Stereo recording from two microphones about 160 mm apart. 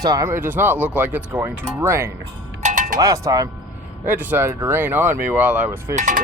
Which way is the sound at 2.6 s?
55° right (ahead or behind).